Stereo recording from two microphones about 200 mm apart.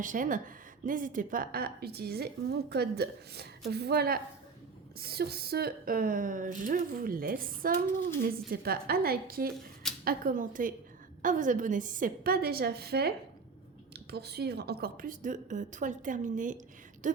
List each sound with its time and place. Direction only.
0.0 s a woman's voice: 40° right (ahead or behind)